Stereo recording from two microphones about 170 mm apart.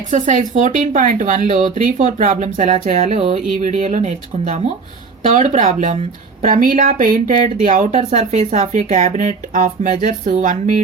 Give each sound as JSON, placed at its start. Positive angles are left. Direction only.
{"t": 0.1, "sound": "speech", "side_deg": -45}
{"t": 3.0, "sound": "a sound", "side_deg": -40}
{"t": 3.6, "sound": "speech", "side_deg": -45}